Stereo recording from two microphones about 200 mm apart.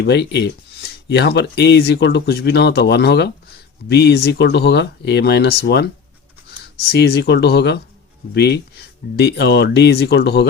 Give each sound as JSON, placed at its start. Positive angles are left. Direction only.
{"t": 0.0, "sound": "speech", "side_deg": 60}